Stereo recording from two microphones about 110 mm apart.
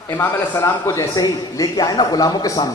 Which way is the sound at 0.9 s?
35° left (ahead or behind).